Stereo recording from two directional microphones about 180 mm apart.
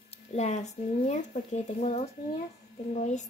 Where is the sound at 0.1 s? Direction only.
40° left (ahead or behind).